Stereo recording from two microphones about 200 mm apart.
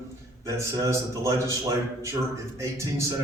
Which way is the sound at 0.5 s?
15° right (ahead or behind).